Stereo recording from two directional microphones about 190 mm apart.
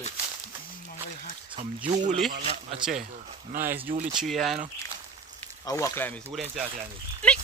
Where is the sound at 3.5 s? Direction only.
45° right (ahead or behind).